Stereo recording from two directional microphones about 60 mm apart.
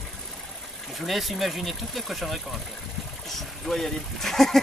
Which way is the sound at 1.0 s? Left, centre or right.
Centre.